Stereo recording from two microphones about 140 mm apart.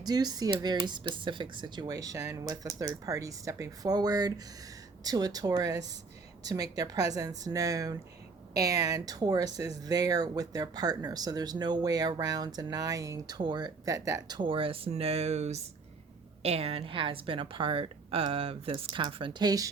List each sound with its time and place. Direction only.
0.0 s a woman's voice: 30° right (ahead or behind)